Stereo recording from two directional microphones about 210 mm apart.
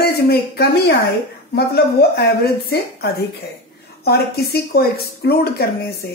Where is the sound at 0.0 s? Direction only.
50° left (ahead or behind).